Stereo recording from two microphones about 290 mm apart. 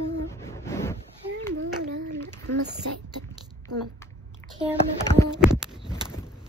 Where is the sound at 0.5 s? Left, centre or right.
Centre.